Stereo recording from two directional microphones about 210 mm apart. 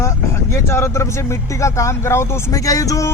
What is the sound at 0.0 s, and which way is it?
Speech, 15° left (ahead or behind).